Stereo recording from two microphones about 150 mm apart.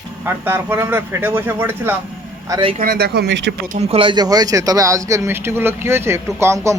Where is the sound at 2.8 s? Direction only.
90° right.